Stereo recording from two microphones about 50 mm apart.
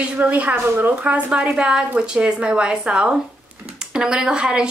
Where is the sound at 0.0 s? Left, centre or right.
Right.